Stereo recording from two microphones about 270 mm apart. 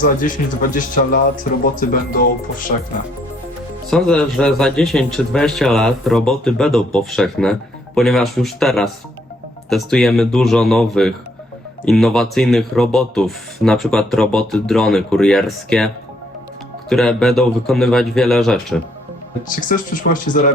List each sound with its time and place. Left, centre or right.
0.0 s speech: left
3.8 s speech: centre
16.9 s speech: centre
19.5 s speech: left